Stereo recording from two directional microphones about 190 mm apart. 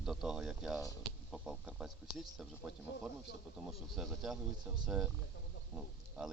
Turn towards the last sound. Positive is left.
turn(degrees=-5)  # may be behind; listen again after turning